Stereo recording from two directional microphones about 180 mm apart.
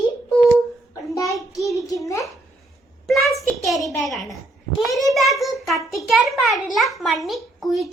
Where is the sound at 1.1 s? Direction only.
20° left (ahead or behind).